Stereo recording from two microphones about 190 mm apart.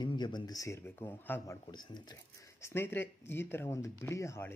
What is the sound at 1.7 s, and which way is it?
Speech, 20° left (ahead or behind).